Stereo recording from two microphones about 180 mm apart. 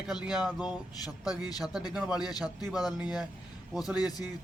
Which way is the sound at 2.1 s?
20° left (ahead or behind).